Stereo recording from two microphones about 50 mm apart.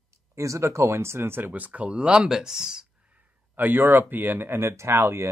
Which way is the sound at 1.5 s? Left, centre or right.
Right.